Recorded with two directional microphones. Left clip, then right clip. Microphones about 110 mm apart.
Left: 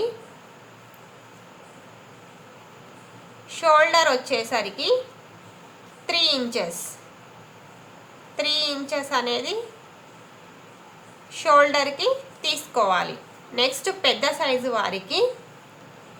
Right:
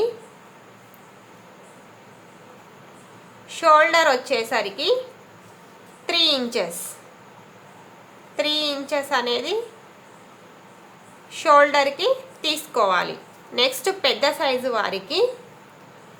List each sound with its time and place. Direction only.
3.5 s a woman's voice: 35° right (ahead or behind)
6.1 s a woman's voice: 40° right (ahead or behind)
8.4 s a woman's voice: 40° right (ahead or behind)
11.3 s a woman's voice: 35° right (ahead or behind)